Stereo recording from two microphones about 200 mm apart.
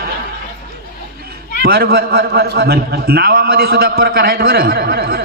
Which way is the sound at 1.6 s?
50° right (ahead or behind).